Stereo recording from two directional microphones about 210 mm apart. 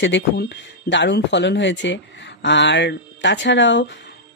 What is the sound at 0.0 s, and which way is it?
Speech, 60° left (ahead or behind).